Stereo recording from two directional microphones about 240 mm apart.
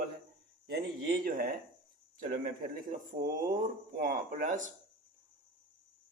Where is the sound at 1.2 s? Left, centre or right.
Right.